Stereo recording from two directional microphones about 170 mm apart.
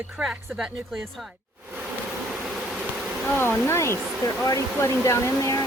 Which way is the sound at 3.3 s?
10° left (ahead or behind).